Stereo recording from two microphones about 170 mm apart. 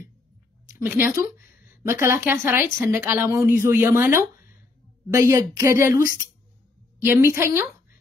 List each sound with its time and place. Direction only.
0.7 s speech: 15° right (ahead or behind)